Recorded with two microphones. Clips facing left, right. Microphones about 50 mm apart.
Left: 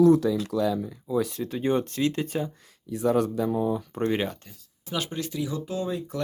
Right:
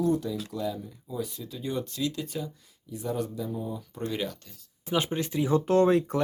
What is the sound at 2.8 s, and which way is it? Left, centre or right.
Speech, left.